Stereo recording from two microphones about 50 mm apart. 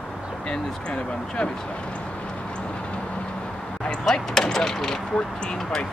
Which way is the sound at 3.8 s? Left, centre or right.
Centre.